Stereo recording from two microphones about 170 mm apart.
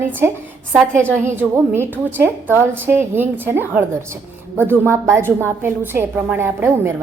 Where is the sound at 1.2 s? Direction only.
15° right (ahead or behind).